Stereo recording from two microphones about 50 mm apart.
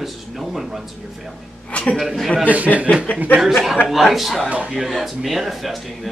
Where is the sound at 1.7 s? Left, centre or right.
Left.